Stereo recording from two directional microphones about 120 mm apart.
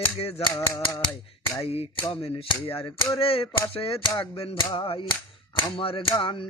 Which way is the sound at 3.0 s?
50° left (ahead or behind).